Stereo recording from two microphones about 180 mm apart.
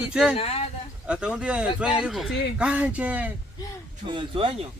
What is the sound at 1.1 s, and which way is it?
Speech, 5° right (ahead or behind).